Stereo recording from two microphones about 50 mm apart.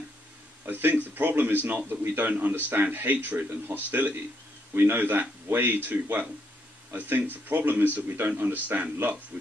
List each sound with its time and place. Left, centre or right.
0.7 s a man's voice: right